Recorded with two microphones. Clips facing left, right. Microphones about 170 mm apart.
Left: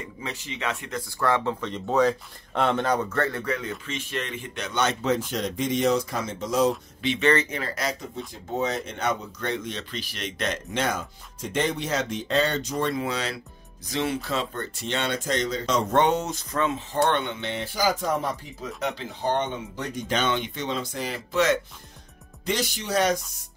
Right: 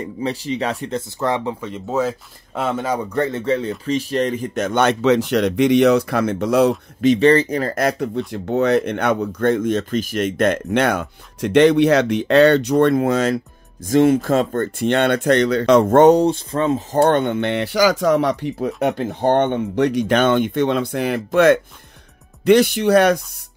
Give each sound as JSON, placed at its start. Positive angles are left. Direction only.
{"t": 0.2, "sound": "speech", "side_deg": -35}
{"t": 1.2, "sound": "speech", "side_deg": -15}
{"t": 7.0, "sound": "speech", "side_deg": -40}
{"t": 17.0, "sound": "speech", "side_deg": -50}
{"t": 18.8, "sound": "speech", "side_deg": -55}